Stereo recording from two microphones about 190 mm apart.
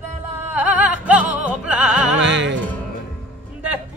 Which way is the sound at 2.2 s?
70° right (ahead or behind).